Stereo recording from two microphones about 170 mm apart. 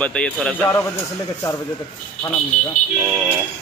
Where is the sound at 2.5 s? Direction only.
45° left (ahead or behind).